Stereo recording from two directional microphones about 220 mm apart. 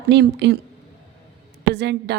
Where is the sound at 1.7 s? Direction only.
50° right (ahead or behind).